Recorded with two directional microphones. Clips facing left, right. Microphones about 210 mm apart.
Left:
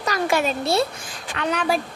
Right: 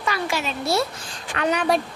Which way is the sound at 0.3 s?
55° left (ahead or behind).